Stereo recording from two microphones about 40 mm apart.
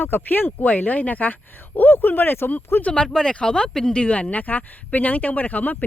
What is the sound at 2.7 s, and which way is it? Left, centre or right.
Speech, left.